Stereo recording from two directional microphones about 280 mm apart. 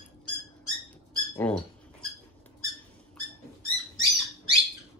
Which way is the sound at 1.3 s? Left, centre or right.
Centre.